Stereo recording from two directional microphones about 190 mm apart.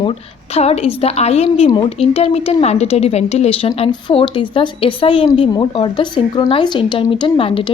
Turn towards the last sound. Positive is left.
turn(degrees=30)  # may be behind; listen again after turning